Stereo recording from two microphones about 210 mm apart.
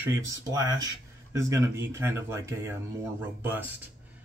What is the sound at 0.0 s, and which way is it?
Speech, 15° right (ahead or behind).